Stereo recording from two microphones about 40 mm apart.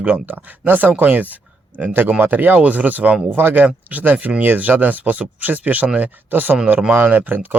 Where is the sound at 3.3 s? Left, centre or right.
Right.